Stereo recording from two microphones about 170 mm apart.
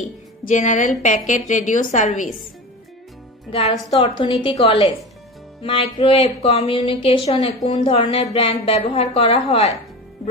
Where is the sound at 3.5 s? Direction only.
40° left (ahead or behind).